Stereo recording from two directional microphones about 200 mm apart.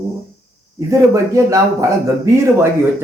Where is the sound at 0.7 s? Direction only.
15° right (ahead or behind).